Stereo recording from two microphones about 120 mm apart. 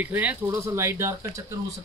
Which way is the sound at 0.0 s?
15° right (ahead or behind).